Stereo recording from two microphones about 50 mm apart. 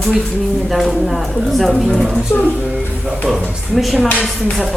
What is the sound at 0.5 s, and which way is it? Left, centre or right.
A woman's voice, centre.